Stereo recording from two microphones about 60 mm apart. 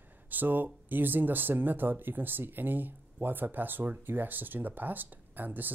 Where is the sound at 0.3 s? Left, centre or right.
Right.